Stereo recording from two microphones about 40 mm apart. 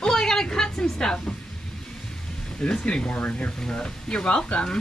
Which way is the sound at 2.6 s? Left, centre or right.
Left.